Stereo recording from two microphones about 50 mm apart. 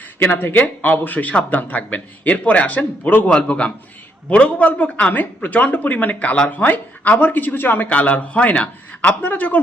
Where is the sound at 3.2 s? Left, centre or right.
Left.